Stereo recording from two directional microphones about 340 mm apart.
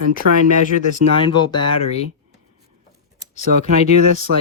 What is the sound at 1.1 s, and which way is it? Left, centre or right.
Speech, centre.